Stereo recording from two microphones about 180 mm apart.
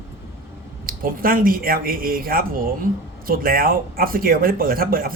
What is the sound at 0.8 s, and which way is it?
A man's voice, 50° right (ahead or behind).